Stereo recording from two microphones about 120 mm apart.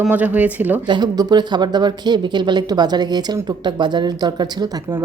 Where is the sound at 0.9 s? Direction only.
35° right (ahead or behind).